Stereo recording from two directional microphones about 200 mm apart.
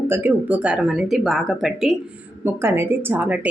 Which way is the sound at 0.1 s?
10° right (ahead or behind).